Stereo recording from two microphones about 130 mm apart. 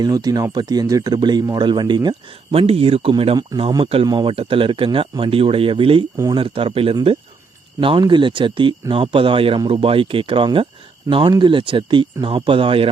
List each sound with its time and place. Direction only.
0.0 s speech: 30° right (ahead or behind); by 3.3 s 45° right (ahead or behind)
4.0 s speech: 35° right (ahead or behind)